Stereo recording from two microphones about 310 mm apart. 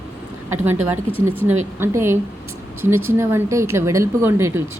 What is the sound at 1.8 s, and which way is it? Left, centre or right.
A woman's voice, centre.